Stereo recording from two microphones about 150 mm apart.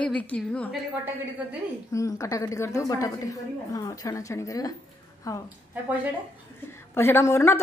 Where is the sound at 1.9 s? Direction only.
20° left (ahead or behind).